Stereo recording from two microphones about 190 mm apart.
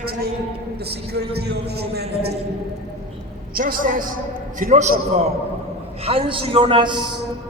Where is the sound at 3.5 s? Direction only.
45° right (ahead or behind).